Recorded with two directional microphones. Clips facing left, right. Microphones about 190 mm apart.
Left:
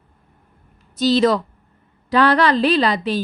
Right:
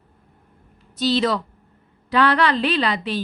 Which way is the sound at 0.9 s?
45° left (ahead or behind).